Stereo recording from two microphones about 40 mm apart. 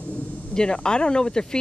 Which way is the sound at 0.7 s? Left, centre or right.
Left.